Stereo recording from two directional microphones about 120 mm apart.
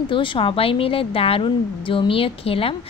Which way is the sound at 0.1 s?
45° left (ahead or behind).